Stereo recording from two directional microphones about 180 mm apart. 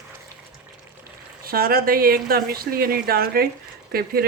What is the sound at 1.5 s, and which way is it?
Speech, 55° right (ahead or behind).